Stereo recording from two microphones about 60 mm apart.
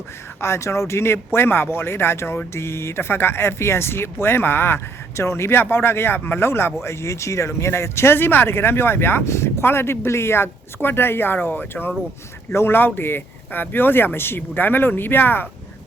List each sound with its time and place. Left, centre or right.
0.4 s speech: left
6.8 s speech: left